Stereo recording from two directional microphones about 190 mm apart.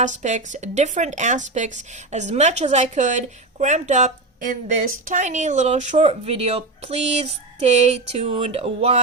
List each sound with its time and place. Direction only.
0.0 s a woman's voice: 40° right (ahead or behind)